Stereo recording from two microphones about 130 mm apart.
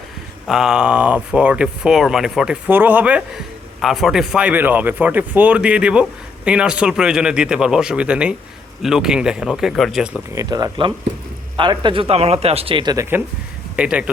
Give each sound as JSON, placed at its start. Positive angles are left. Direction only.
{"t": 0.4, "sound": "speech", "side_deg": -5}
{"t": 2.6, "sound": "a man's voice", "side_deg": -15}
{"t": 10.3, "sound": "speech", "side_deg": -30}
{"t": 13.7, "sound": "speech", "side_deg": -10}